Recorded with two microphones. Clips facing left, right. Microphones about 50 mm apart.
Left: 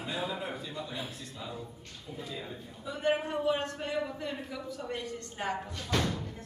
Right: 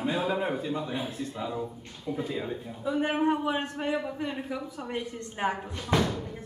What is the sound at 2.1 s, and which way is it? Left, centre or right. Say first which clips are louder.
Speech: right 8 dB; right.